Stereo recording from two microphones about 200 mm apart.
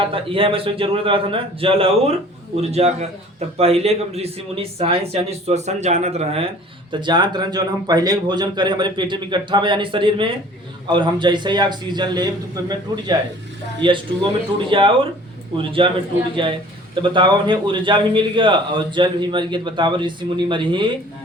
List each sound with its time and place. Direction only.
0.0 s a man's voice: 25° right (ahead or behind)